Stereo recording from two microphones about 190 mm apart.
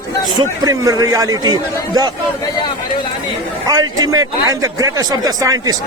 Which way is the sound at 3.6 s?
20° right (ahead or behind).